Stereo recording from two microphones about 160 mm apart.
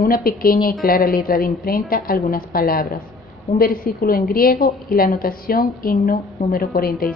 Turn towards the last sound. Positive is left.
turn(degrees=70)  # may be behind; listen again after turning